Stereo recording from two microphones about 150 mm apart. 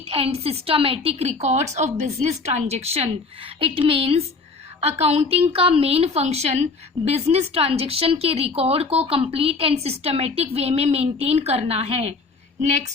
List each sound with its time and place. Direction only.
0.1 s a woman's voice: 40° right (ahead or behind)